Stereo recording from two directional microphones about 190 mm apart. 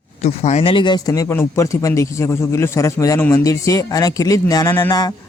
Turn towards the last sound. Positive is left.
turn(degrees=20)  # may be behind; listen again after turning